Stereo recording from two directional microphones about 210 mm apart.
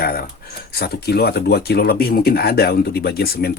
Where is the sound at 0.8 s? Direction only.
50° left (ahead or behind).